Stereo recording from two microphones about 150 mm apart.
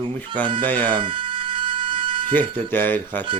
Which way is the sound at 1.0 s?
35° right (ahead or behind).